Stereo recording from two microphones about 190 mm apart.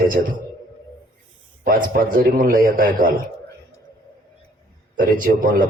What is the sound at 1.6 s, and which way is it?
A man's voice, 45° right (ahead or behind).